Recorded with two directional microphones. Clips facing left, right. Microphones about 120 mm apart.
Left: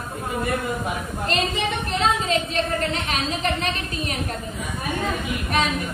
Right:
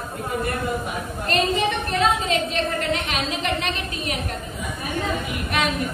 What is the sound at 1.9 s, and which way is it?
A woman's voice, 35° left (ahead or behind).